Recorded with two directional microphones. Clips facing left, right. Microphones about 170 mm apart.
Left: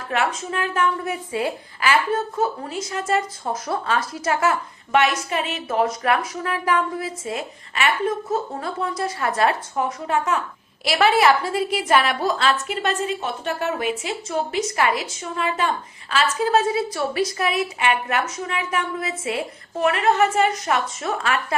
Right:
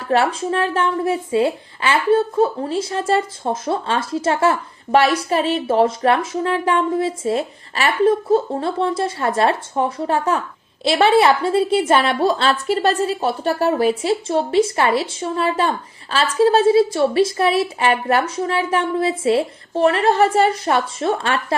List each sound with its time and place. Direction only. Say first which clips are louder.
0.0 s a woman's voice: right 6 dB; 30° right (ahead or behind)